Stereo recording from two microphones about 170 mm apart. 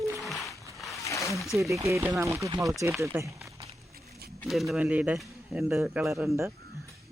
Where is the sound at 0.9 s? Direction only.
20° left (ahead or behind).